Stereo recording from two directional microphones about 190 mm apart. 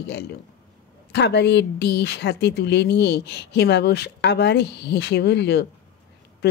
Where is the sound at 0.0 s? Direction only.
60° left (ahead or behind).